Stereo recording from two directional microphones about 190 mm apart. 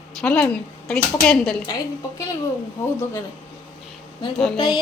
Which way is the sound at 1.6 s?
20° left (ahead or behind).